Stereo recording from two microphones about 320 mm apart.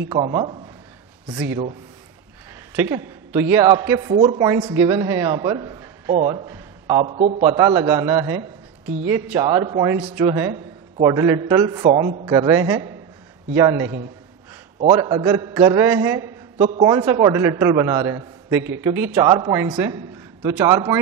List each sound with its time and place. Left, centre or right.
0.1 s a man's voice: centre
2.7 s a man's voice: centre